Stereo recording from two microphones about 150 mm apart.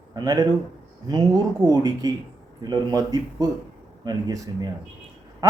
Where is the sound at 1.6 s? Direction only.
25° right (ahead or behind).